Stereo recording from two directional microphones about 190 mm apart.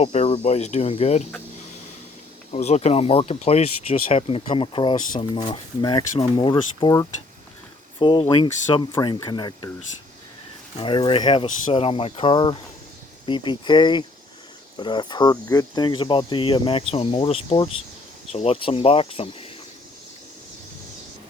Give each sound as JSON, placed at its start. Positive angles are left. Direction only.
{"t": 0.0, "sound": "speech", "side_deg": 35}
{"t": 2.5, "sound": "speech", "side_deg": 35}
{"t": 10.8, "sound": "speech", "side_deg": 30}